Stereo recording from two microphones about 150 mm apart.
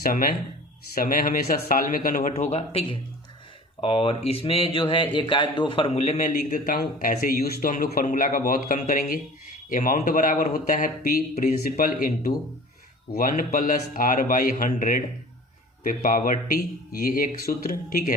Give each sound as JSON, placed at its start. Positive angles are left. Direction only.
{"t": 0.0, "sound": "a man's voice", "side_deg": 75}
{"t": 1.7, "sound": "a man's voice", "side_deg": 70}
{"t": 2.3, "sound": "a man's voice", "side_deg": 50}
{"t": 6.0, "sound": "a man's voice", "side_deg": 50}